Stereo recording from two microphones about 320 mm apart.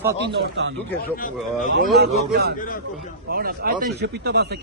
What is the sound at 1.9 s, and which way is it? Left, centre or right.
Speech, right.